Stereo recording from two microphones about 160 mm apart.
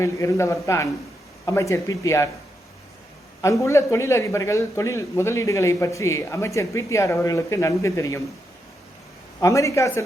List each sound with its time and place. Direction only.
0.0 s a man's voice: 20° left (ahead or behind)
3.4 s a man's voice: 20° left (ahead or behind)
9.4 s a man's voice: 20° left (ahead or behind)